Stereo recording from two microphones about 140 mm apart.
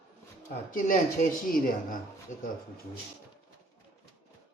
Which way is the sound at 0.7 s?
65° left (ahead or behind).